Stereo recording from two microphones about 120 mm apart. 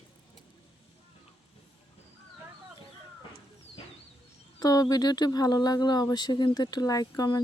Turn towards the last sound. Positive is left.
turn(degrees=35)  # may be behind; listen again after turning